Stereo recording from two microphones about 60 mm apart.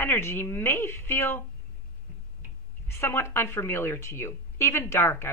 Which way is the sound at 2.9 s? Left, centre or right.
Left.